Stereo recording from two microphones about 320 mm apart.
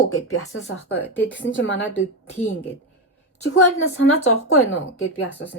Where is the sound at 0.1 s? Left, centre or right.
Left.